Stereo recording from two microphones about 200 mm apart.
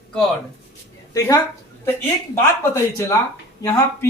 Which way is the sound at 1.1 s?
15° left (ahead or behind).